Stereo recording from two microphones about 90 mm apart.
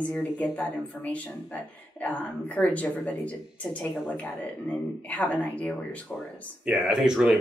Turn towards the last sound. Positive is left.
turn(degrees=-5)  # may be behind; listen again after turning